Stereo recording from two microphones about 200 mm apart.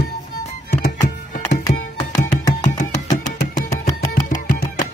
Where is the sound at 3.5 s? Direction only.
40° left (ahead or behind).